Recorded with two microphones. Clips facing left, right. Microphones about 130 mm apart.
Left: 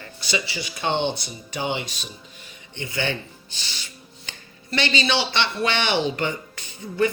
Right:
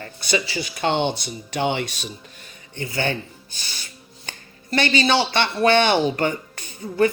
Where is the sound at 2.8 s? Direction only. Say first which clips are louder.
Right 2 dB; 45° right (ahead or behind).